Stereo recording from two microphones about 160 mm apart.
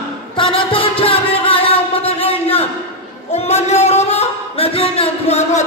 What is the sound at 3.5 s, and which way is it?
Music, 40° left (ahead or behind).